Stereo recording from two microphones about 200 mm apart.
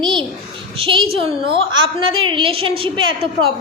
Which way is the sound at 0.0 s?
25° right (ahead or behind).